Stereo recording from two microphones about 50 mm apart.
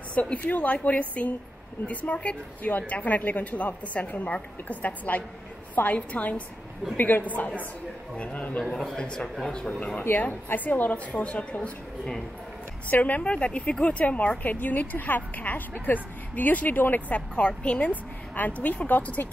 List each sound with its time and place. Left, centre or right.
0.1 s a woman's voice: left
8.6 s a man's voice: centre
9.0 s a woman's voice: left
10.0 s speech: left
13.0 s a woman's voice: left
17.4 s a woman's voice: left